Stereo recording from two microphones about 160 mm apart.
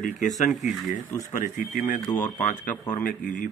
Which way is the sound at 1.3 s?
55° left (ahead or behind).